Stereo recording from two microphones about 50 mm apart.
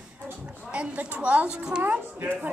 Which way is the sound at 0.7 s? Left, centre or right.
Right.